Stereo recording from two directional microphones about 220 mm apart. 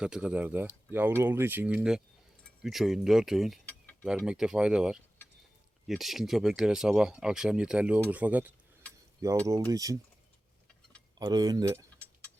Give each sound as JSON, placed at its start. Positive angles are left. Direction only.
{"t": 0.0, "sound": "speech", "side_deg": -5}
{"t": 2.6, "sound": "mechanisms", "side_deg": 0}
{"t": 4.3, "sound": "speech", "side_deg": -5}
{"t": 11.2, "sound": "speech", "side_deg": -20}